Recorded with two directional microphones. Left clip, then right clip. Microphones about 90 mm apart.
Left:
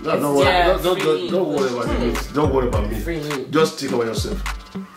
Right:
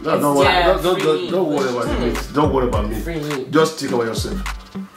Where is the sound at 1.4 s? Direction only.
10° right (ahead or behind).